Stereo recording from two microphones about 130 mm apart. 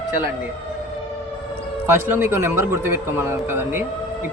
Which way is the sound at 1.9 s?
20° right (ahead or behind).